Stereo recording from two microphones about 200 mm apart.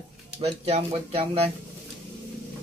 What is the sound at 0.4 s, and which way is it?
Speech, 30° right (ahead or behind).